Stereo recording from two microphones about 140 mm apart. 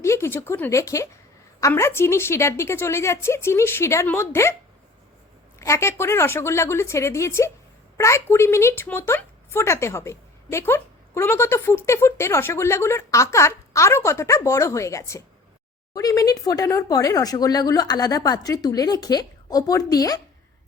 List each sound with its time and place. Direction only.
0.0 s a woman's voice: 20° left (ahead or behind)
5.5 s a woman's voice: 20° left (ahead or behind)